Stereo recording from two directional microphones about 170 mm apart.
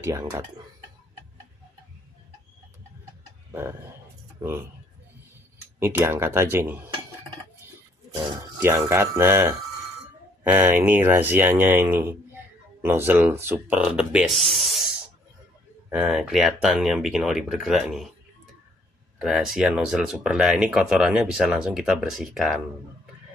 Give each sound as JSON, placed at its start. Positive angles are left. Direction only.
{"t": 0.0, "sound": "speech", "side_deg": -20}
{"t": 3.5, "sound": "speech", "side_deg": -15}
{"t": 5.8, "sound": "speech", "side_deg": -15}
{"t": 8.1, "sound": "speech", "side_deg": -20}
{"t": 15.9, "sound": "speech", "side_deg": -5}
{"t": 19.2, "sound": "speech", "side_deg": 0}